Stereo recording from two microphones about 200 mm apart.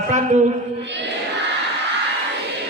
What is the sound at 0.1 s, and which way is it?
Speech, 35° right (ahead or behind).